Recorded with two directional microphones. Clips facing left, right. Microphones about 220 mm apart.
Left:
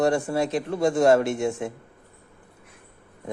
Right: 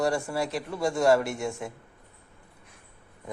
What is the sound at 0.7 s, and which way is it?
Speech, 50° left (ahead or behind).